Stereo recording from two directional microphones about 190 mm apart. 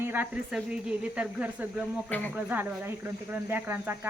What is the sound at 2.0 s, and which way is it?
Speech, 10° left (ahead or behind).